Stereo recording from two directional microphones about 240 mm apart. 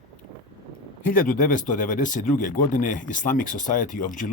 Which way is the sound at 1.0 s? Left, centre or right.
Left.